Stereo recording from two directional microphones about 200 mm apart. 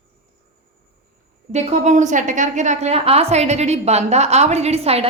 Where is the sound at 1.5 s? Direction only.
35° right (ahead or behind).